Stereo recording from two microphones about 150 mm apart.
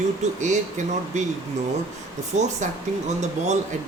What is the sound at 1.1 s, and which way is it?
Speech, 50° right (ahead or behind).